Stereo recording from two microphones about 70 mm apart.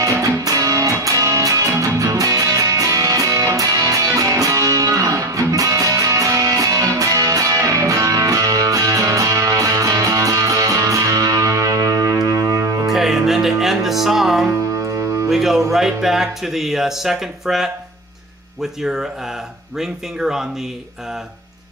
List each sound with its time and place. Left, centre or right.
0.0 s music: right
12.8 s music: centre
18.6 s speech: centre